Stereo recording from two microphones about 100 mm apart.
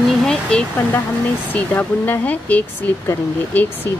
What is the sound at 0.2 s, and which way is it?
Speech, 5° left (ahead or behind).